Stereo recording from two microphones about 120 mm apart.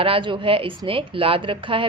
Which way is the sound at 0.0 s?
45° right (ahead or behind).